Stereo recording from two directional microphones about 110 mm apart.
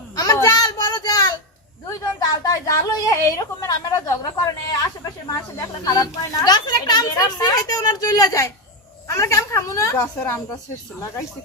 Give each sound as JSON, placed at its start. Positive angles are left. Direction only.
{"t": 0.2, "sound": "a sound", "side_deg": 35}
{"t": 1.9, "sound": "speech", "side_deg": 35}
{"t": 5.3, "sound": "a woman's voice", "side_deg": 35}